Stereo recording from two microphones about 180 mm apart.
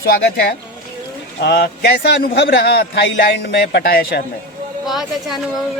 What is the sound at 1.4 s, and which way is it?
A man's voice, 65° left (ahead or behind).